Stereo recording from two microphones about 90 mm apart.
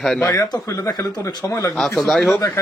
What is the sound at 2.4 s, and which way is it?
Speech, 30° left (ahead or behind).